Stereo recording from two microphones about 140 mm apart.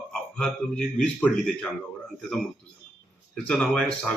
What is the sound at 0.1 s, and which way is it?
A man's voice, 5° left (ahead or behind).